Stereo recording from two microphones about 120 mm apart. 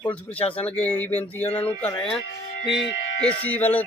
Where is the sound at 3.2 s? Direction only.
10° left (ahead or behind).